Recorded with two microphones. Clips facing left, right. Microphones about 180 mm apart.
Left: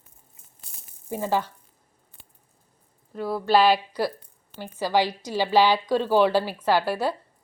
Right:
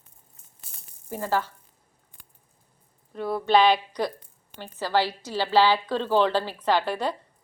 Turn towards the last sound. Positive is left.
turn(degrees=5)  # may be behind; listen again after turning